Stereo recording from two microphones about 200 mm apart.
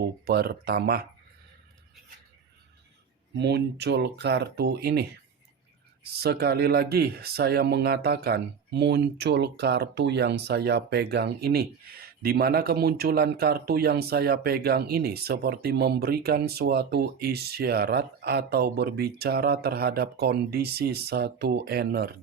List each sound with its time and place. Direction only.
0.0 s speech: 50° right (ahead or behind)
3.3 s speech: 55° right (ahead or behind)